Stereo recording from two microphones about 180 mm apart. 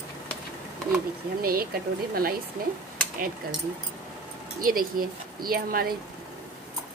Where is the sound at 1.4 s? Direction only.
55° right (ahead or behind).